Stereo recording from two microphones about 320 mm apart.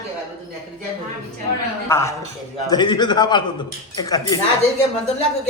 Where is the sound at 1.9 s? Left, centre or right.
Centre.